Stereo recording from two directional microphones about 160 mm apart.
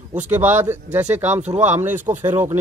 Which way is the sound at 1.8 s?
10° right (ahead or behind).